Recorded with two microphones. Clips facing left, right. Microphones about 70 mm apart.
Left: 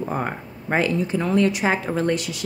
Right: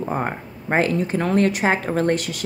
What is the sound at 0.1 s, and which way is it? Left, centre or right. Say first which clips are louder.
Speech: right 2 dB; right.